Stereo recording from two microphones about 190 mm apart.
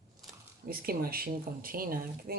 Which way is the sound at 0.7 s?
50° right (ahead or behind).